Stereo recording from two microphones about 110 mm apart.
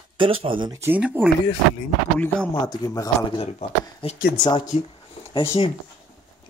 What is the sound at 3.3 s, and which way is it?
Speech, 65° left (ahead or behind).